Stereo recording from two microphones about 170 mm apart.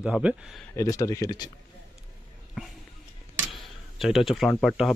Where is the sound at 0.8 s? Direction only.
20° left (ahead or behind).